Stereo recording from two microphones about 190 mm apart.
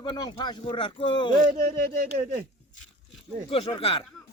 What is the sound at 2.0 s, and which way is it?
Speech, 50° right (ahead or behind).